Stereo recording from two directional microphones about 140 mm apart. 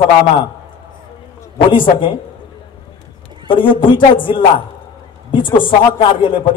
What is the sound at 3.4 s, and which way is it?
A man's voice, 35° left (ahead or behind).